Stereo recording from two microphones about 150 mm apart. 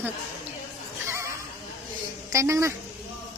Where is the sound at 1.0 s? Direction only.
20° right (ahead or behind).